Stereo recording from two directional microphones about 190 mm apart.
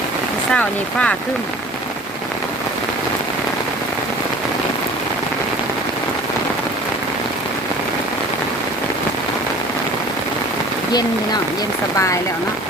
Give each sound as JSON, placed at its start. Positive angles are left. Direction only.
{"t": 0.5, "sound": "speech", "side_deg": 5}
{"t": 11.9, "sound": "speech", "side_deg": 15}